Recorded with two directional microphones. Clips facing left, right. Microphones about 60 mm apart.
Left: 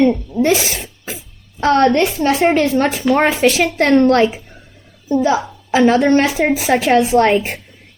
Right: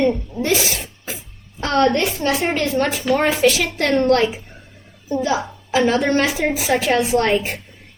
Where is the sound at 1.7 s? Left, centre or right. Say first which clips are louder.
Left 4 dB; left.